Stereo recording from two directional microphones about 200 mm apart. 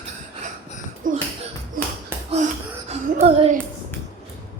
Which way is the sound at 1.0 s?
40° right (ahead or behind).